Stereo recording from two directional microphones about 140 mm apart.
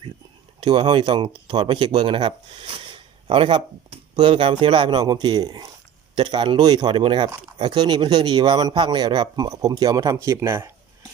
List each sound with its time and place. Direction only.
0.6 s speech: 35° right (ahead or behind); by 10.7 s 20° right (ahead or behind)